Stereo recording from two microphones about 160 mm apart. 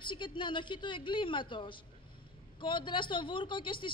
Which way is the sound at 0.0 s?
30° left (ahead or behind).